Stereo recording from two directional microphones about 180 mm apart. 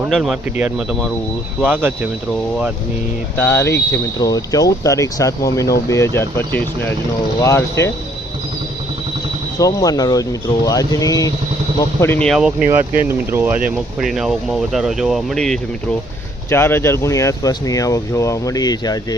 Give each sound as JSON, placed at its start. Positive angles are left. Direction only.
{"t": 0.1, "sound": "speech", "side_deg": 0}
{"t": 1.6, "sound": "speech", "side_deg": -10}
{"t": 3.5, "sound": "speech", "side_deg": 15}
{"t": 9.6, "sound": "speech", "side_deg": 20}
{"t": 12.3, "sound": "speech", "side_deg": -5}
{"t": 13.7, "sound": "speech", "side_deg": 0}
{"t": 16.5, "sound": "speech", "side_deg": 15}